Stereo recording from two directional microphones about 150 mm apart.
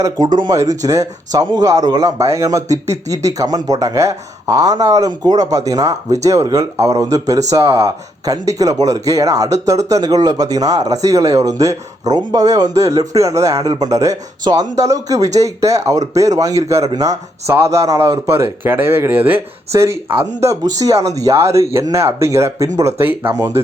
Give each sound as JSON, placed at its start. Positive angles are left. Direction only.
{"t": 0.3, "sound": "speech", "side_deg": -25}